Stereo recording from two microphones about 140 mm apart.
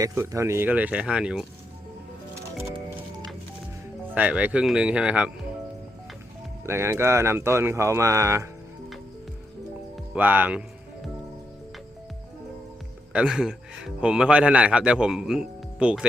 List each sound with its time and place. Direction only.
0.0 s speech: 20° right (ahead or behind)
4.1 s speech: 10° right (ahead or behind)
6.7 s speech: 20° right (ahead or behind)
10.2 s speech: 10° right (ahead or behind)
13.1 s speech: 5° right (ahead or behind)